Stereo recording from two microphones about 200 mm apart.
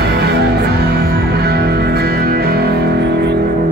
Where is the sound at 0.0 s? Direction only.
55° right (ahead or behind).